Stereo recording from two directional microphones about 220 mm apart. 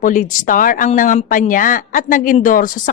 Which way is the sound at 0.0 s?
35° left (ahead or behind).